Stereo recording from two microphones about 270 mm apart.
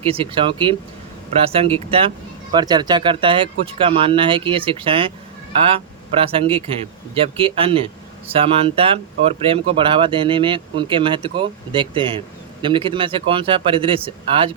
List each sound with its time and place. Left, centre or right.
0.0 s speech: centre